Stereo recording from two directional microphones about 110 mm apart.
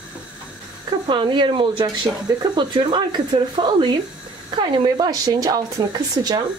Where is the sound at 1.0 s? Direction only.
45° right (ahead or behind).